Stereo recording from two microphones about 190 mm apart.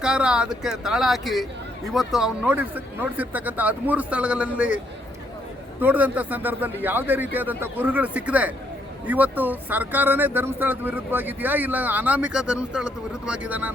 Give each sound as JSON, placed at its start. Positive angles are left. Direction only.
{"t": 0.0, "sound": "speech", "side_deg": -5}
{"t": 5.8, "sound": "speech", "side_deg": -10}